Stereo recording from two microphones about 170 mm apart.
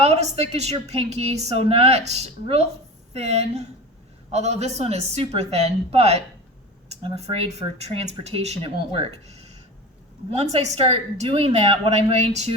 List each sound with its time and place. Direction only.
0.0 s a woman's voice: 40° right (ahead or behind)